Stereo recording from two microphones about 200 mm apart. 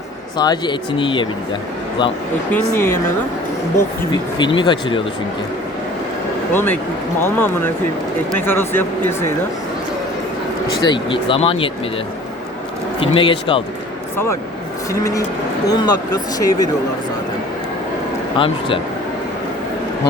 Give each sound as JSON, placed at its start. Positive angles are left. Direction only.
{"t": 0.3, "sound": "speech", "side_deg": 20}
{"t": 2.5, "sound": "speech", "side_deg": 10}
{"t": 4.4, "sound": "speech", "side_deg": 25}
{"t": 6.5, "sound": "speech", "side_deg": 10}
{"t": 10.8, "sound": "speech", "side_deg": 25}
{"t": 13.0, "sound": "speech", "side_deg": 25}
{"t": 15.6, "sound": "speech", "side_deg": 20}
{"t": 18.3, "sound": "speech", "side_deg": 25}